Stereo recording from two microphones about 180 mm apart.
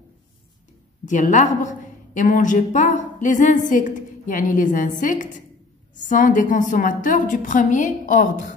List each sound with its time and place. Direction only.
1.0 s a woman's voice: 45° left (ahead or behind)